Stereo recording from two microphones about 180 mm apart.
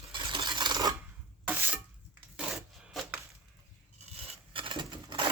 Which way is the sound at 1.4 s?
10° right (ahead or behind).